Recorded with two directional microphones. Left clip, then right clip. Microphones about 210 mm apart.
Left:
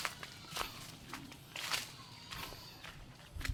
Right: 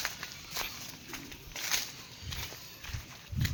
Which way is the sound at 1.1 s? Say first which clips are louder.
Right 1 dB; 45° right (ahead or behind).